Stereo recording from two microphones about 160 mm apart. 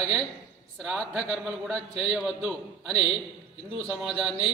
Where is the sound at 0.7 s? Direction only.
Centre (ahead or behind).